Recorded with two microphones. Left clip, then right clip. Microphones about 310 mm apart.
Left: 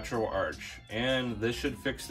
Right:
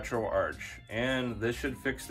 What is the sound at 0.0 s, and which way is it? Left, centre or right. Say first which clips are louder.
Speech: right 1 dB; centre.